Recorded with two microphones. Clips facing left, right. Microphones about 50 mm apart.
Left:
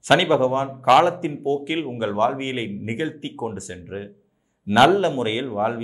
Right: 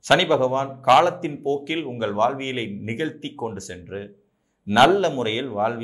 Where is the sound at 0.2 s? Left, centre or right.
Centre.